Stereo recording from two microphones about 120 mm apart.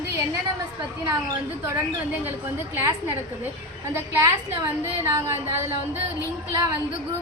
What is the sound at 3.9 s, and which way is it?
A woman's voice, 25° right (ahead or behind).